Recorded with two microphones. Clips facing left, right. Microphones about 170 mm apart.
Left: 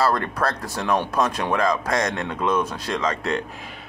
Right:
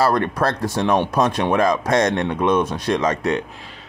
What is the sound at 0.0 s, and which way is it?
Speech, 25° right (ahead or behind).